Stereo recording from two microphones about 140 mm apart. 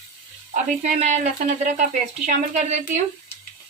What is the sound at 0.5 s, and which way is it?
Speech, 60° right (ahead or behind).